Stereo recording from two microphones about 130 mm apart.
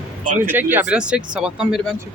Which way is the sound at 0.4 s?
15° right (ahead or behind).